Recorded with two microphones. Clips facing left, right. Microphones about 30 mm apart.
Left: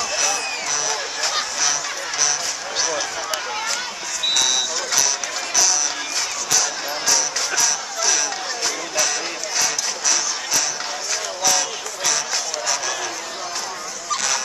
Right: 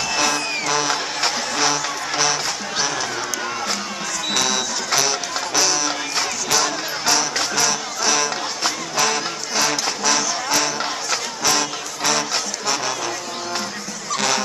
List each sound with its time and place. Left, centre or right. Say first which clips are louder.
0.2 s a sound: right 2 dB; right
1.6 s music: right 3 dB; right
2.8 s run: even; centre
4.3 s music: left 1 dB; right